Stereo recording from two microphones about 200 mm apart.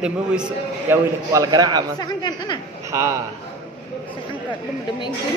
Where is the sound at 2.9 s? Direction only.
15° right (ahead or behind).